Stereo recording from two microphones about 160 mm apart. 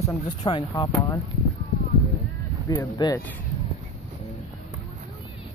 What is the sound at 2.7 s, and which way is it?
Speech, 20° left (ahead or behind).